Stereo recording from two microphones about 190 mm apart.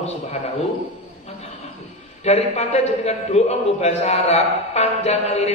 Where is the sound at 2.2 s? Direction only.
35° left (ahead or behind).